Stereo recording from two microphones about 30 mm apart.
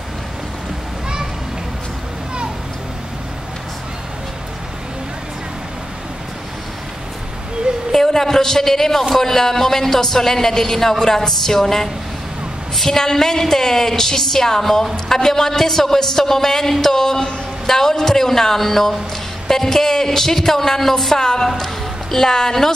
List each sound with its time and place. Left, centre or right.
7.9 s a man's voice: centre